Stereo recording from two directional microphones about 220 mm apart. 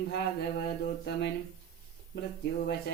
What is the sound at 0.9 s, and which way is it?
Speech, 50° left (ahead or behind).